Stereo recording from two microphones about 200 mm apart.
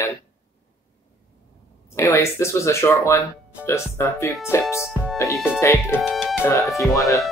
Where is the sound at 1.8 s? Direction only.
15° left (ahead or behind).